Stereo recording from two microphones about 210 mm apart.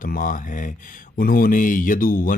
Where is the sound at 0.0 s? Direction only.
40° left (ahead or behind).